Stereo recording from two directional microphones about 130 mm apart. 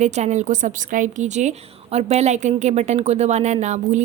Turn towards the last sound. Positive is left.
turn(degrees=-65)  # may be behind; listen again after turning